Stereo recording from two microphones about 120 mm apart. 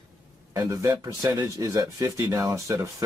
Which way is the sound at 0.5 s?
25° right (ahead or behind).